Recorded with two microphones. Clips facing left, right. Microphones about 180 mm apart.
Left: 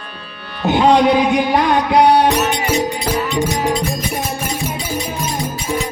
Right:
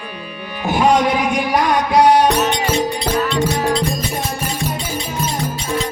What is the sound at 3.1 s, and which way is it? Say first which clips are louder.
Speech: right 2 dB; 15° left (ahead or behind).